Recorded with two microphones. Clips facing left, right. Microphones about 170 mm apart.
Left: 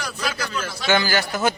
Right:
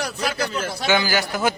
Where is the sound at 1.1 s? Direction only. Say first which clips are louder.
Even; 15° right (ahead or behind).